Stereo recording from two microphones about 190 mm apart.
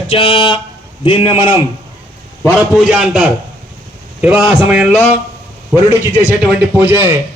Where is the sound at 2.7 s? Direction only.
5° right (ahead or behind).